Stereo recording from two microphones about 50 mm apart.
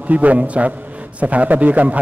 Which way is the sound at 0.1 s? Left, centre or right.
Right.